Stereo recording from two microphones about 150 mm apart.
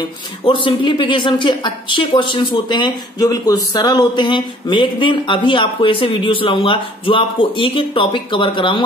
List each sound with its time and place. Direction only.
0.5 s speech: 30° left (ahead or behind)